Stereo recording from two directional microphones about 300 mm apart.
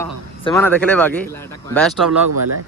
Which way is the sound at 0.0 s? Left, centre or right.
Centre.